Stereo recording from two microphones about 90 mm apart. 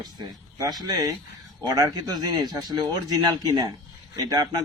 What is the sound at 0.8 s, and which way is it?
Speech, 40° right (ahead or behind).